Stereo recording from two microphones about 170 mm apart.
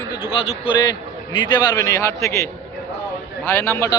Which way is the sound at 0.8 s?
25° left (ahead or behind).